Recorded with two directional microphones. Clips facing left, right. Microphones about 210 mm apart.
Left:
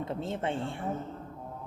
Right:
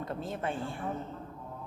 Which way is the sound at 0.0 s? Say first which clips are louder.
Left 2 dB; 25° left (ahead or behind).